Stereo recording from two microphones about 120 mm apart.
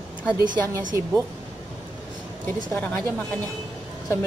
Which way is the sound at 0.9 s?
25° right (ahead or behind).